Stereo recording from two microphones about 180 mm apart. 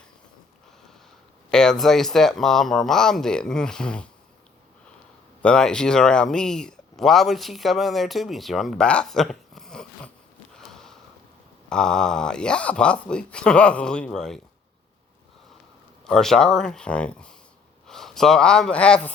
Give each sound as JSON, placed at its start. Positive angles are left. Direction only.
{"t": 1.5, "sound": "speech", "side_deg": 5}
{"t": 5.4, "sound": "speech", "side_deg": 5}
{"t": 10.5, "sound": "a sound", "side_deg": 5}
{"t": 11.7, "sound": "speech", "side_deg": 5}
{"t": 16.0, "sound": "speech", "side_deg": 5}